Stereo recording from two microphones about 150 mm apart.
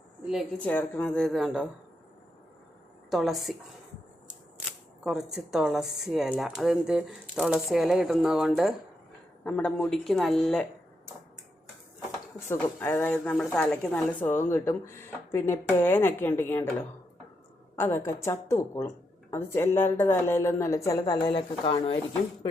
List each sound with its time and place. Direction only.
0.6 s speech: 10° left (ahead or behind)
3.1 s speech: centre (ahead or behind)
5.0 s speech: 5° right (ahead or behind)
9.4 s speech: 10° left (ahead or behind)
12.5 s speech: 15° left (ahead or behind)
17.7 s speech: 15° left (ahead or behind); by 21.9 s 40° left (ahead or behind)